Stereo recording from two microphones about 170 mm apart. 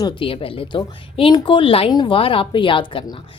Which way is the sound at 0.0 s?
30° left (ahead or behind).